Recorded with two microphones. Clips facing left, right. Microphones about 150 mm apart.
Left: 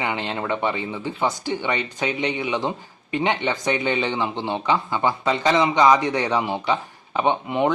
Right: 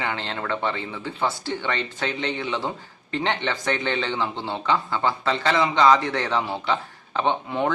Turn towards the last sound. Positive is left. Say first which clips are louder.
# left 3 dB
turn(degrees=20)  # may be behind; listen again after turning